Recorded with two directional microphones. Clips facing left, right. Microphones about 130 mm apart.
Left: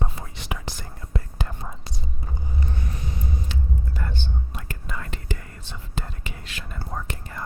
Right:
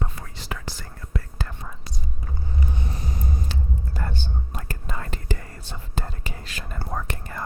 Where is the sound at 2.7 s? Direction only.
30° right (ahead or behind).